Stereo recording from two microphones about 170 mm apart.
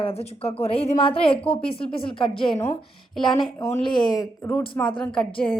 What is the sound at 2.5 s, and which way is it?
Speech, 15° left (ahead or behind).